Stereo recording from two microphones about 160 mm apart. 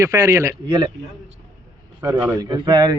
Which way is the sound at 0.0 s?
20° right (ahead or behind).